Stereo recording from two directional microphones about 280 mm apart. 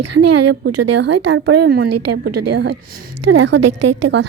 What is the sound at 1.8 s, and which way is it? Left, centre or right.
Speech, right.